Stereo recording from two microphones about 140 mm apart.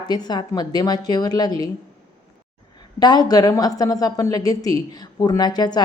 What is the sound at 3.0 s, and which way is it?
A woman's voice, 30° left (ahead or behind).